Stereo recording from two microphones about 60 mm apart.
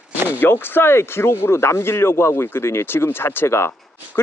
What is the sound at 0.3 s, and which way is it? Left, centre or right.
Speech, left.